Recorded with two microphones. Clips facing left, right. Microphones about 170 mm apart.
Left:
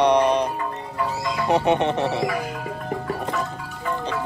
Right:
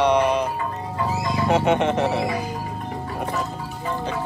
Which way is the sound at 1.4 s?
20° left (ahead or behind).